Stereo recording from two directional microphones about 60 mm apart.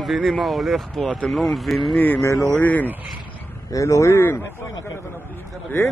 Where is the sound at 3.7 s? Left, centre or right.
Left.